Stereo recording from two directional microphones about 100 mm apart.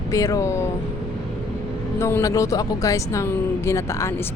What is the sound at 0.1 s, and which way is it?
Speech, 35° left (ahead or behind).